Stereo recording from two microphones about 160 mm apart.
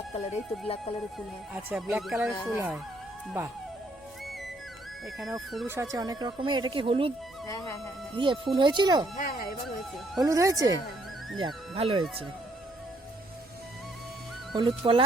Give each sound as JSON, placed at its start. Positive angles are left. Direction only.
{"t": 0.1, "sound": "speech", "side_deg": 45}
{"t": 1.7, "sound": "speech", "side_deg": -5}
{"t": 5.6, "sound": "speech", "side_deg": -15}
{"t": 7.4, "sound": "music", "side_deg": 20}
{"t": 8.1, "sound": "speech", "side_deg": -30}
{"t": 9.1, "sound": "speech", "side_deg": 65}
{"t": 10.2, "sound": "speech", "side_deg": -20}
{"t": 11.3, "sound": "speech", "side_deg": -35}
{"t": 14.5, "sound": "speech", "side_deg": -30}